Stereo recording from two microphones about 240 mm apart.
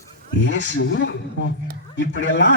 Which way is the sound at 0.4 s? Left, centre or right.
Left.